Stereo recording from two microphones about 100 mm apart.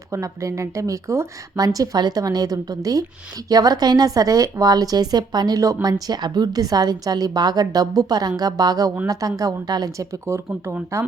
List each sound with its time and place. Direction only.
0.1 s speech: 30° right (ahead or behind)